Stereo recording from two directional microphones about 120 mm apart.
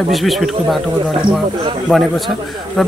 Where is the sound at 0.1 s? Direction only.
Centre (ahead or behind).